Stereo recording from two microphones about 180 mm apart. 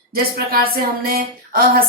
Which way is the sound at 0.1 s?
55° right (ahead or behind).